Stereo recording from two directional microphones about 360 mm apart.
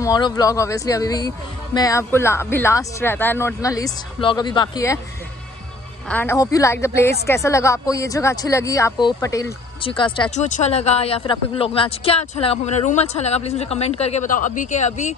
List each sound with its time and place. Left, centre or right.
0.0 s speech: centre
6.0 s speech: centre